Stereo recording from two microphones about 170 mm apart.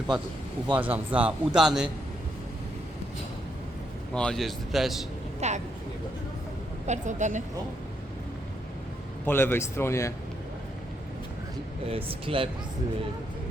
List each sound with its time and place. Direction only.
0.8 s a man's voice: 10° right (ahead or behind)
4.1 s speech: 5° left (ahead or behind)
5.4 s speech: 40° right (ahead or behind)
6.8 s a woman's voice: 45° right (ahead or behind)
9.2 s speech: 10° left (ahead or behind)
11.9 s speech: 35° right (ahead or behind)